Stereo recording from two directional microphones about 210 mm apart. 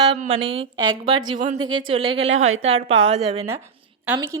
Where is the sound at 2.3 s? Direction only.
75° right (ahead or behind).